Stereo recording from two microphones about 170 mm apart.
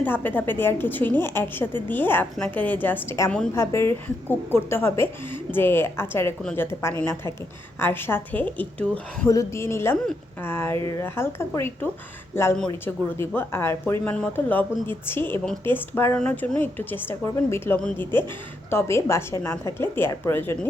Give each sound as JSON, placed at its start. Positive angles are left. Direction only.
{"t": 0.0, "sound": "a woman's voice", "side_deg": 10}